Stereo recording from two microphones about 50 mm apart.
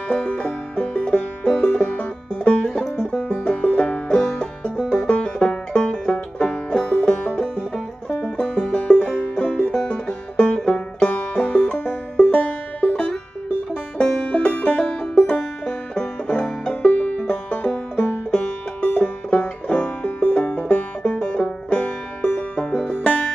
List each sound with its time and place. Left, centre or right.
0.1 s music: left
2.6 s music: centre
3.0 s music: centre
5.0 s banjo: left
5.8 s music: left
16.8 s music: left
22.6 s music: centre